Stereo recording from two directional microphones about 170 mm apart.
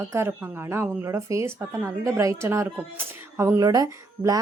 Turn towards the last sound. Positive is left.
turn(degrees=-20)  # may be behind; listen again after turning